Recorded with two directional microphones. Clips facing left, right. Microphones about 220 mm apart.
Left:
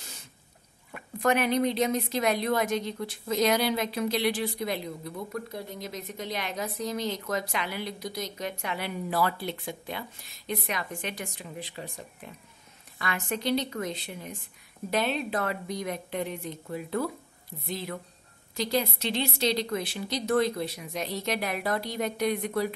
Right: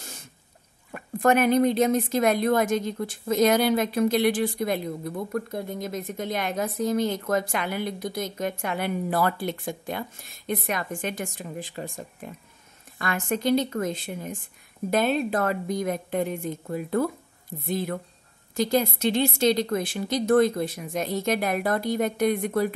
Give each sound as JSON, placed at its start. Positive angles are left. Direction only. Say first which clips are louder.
{"t": 0.9, "sound": "a woman's voice", "louder": "right 5 dB", "side_deg": -50}